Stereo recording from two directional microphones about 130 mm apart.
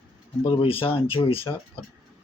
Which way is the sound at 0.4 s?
45° left (ahead or behind).